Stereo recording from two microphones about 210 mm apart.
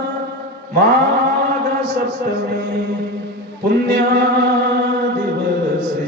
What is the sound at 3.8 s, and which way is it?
Male singing, 55° right (ahead or behind).